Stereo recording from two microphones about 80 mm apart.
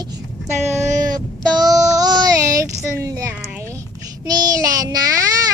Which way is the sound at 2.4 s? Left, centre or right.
Right.